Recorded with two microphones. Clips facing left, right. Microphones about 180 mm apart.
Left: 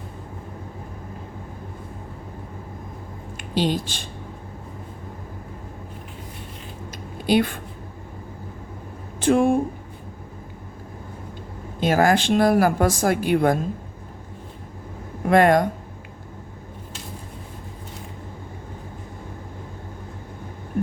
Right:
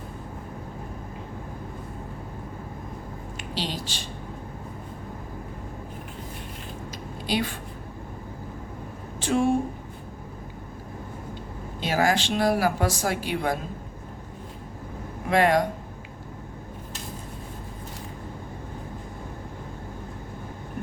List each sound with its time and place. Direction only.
3.5 s speech: 50° left (ahead or behind)
7.3 s a woman's voice: 55° left (ahead or behind)
9.2 s speech: 55° left (ahead or behind)
11.8 s speech: 50° left (ahead or behind)
15.3 s speech: 50° left (ahead or behind)